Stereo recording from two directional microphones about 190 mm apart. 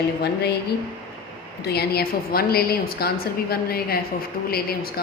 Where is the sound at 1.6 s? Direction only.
55° left (ahead or behind).